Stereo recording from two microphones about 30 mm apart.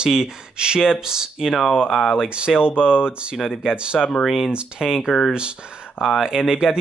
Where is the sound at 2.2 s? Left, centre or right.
Right.